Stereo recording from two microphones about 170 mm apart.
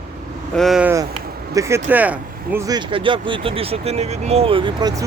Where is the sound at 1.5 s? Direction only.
15° right (ahead or behind).